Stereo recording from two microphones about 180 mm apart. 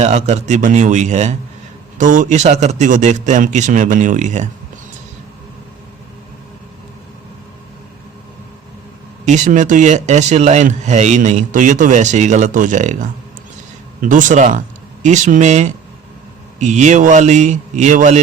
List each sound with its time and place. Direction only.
0.0 s a man's voice: 40° right (ahead or behind)
9.2 s a man's voice: 40° right (ahead or behind)